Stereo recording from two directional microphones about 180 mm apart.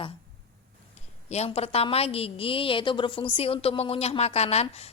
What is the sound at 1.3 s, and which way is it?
A woman's voice, 35° left (ahead or behind).